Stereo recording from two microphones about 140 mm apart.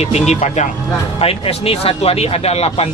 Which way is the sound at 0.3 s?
55° left (ahead or behind).